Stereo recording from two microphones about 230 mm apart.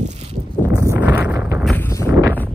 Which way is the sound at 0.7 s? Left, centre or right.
Centre.